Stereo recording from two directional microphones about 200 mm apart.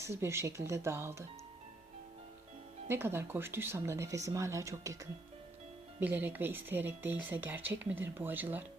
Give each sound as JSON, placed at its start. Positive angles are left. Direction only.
{"t": 0.0, "sound": "speech", "side_deg": -15}
{"t": 2.9, "sound": "speech", "side_deg": -10}
{"t": 6.0, "sound": "speech", "side_deg": -10}